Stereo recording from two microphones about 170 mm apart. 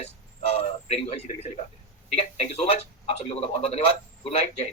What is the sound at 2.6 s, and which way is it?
A man's voice, 35° left (ahead or behind).